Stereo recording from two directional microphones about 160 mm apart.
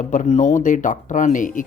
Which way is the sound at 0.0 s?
50° left (ahead or behind).